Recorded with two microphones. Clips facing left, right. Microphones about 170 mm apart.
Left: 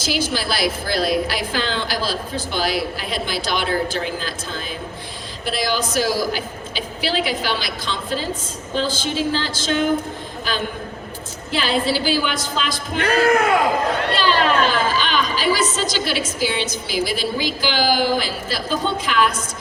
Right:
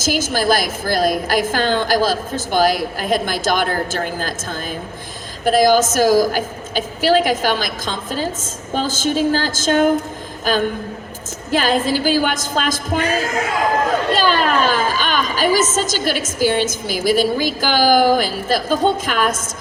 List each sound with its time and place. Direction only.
0.0 s a woman's voice: 45° right (ahead or behind)
13.0 s speech: 60° left (ahead or behind)
14.1 s a woman's voice: 45° right (ahead or behind)